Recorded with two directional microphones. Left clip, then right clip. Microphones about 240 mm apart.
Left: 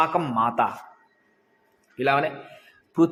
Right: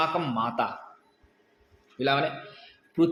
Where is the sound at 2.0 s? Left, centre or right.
Left.